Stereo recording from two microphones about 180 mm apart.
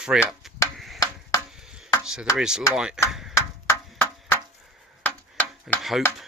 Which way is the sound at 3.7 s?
10° left (ahead or behind).